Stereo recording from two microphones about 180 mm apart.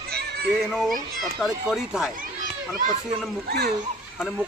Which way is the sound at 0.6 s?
Centre (ahead or behind).